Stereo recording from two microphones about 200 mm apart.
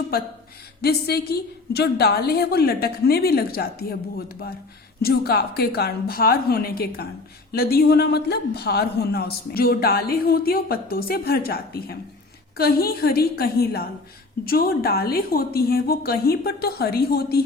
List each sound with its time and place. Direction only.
0.8 s a man's voice: 50° left (ahead or behind)
5.0 s a man's voice: 50° left (ahead or behind)